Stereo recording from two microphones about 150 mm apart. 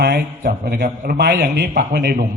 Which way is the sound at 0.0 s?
90° right.